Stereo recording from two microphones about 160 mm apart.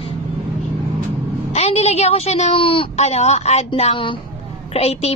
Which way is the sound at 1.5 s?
40° left (ahead or behind).